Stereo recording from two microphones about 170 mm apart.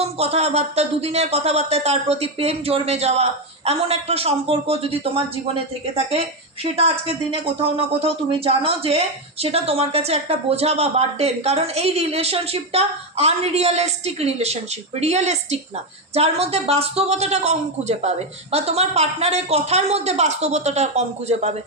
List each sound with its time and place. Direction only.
0.0 s speech: 35° right (ahead or behind)